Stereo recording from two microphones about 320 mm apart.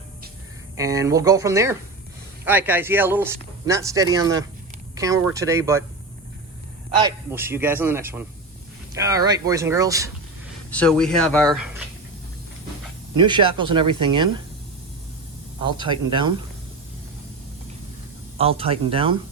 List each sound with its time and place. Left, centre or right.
0.8 s speech: centre
7.0 s speech: centre
10.7 s speech: centre
13.1 s speech: centre
15.8 s speech: centre
18.3 s speech: centre